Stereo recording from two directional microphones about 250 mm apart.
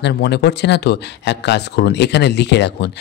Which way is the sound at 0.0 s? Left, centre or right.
Left.